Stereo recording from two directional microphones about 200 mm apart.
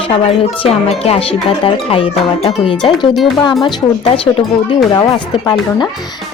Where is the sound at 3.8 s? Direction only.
15° left (ahead or behind).